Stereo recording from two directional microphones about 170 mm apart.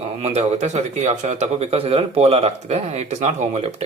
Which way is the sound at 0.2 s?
40° right (ahead or behind).